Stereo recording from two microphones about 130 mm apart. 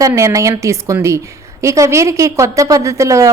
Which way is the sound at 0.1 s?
25° right (ahead or behind).